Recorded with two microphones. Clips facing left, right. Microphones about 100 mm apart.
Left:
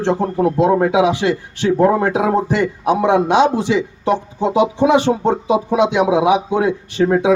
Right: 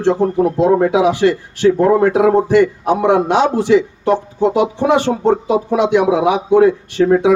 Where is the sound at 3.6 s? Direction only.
55° right (ahead or behind).